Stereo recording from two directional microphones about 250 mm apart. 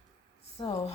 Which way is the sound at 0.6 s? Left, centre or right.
Left.